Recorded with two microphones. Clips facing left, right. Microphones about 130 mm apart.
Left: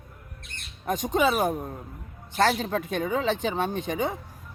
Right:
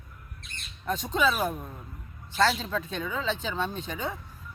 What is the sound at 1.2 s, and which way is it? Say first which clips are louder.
Speech: left 3 dB; 60° left (ahead or behind).